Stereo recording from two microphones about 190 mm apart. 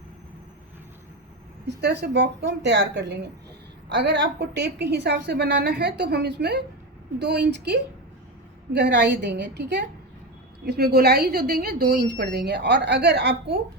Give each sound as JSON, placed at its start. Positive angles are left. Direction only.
{"t": 1.6, "sound": "a woman's voice", "side_deg": -65}